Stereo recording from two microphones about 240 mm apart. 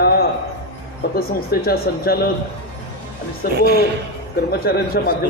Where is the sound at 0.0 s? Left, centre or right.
Left.